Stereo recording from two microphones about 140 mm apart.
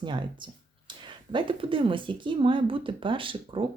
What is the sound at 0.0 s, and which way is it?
Speech, 35° right (ahead or behind).